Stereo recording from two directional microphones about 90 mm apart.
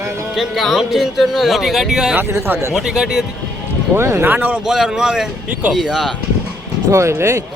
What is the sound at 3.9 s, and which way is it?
Speech, 30° right (ahead or behind).